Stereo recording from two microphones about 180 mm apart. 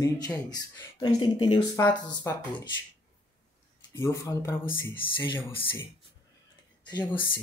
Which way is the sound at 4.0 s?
15° left (ahead or behind).